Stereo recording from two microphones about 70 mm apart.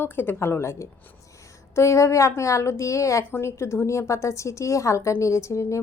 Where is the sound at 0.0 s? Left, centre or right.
Left.